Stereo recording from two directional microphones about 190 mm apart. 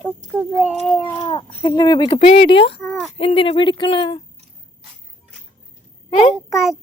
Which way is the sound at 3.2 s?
30° left (ahead or behind).